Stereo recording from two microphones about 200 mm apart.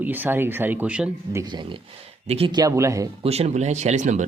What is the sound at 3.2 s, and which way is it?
Speech, 30° right (ahead or behind).